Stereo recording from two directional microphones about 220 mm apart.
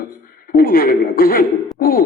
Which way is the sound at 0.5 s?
40° left (ahead or behind).